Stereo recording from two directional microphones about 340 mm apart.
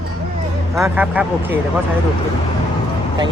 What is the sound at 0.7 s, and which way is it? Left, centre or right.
Speech, centre.